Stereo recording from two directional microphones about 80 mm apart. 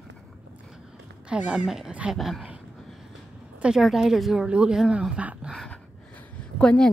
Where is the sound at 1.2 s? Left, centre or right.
Centre.